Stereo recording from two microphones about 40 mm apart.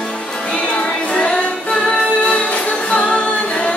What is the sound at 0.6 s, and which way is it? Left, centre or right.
Music, left.